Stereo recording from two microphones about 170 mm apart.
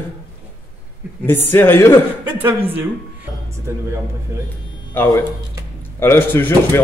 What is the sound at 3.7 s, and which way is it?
Speech, 15° right (ahead or behind).